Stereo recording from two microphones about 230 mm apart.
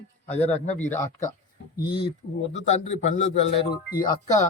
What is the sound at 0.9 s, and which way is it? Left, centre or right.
Speech, centre.